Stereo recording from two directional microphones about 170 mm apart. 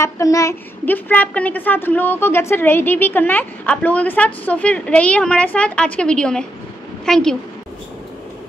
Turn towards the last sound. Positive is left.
turn(degrees=5)  # may be behind; listen again after turning